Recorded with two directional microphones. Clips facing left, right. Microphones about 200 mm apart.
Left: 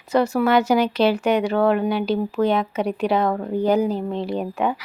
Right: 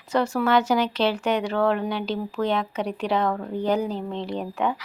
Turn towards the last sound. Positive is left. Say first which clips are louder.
# left 3 dB
turn(degrees=10)  # may be behind; listen again after turning